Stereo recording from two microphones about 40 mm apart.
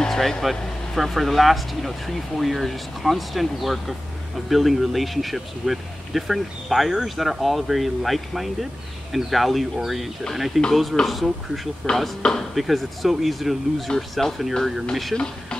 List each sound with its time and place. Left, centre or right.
0.1 s speech: centre
7.2 s speech: centre
12.2 s speech: centre
12.5 s speech: centre